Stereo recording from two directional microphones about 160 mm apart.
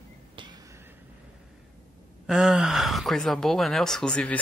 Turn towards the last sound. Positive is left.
turn(degrees=5)  # may be behind; listen again after turning